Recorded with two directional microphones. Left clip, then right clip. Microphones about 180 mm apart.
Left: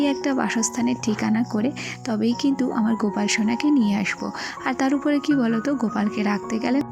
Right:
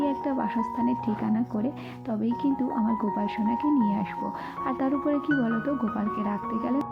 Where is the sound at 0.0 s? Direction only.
25° left (ahead or behind).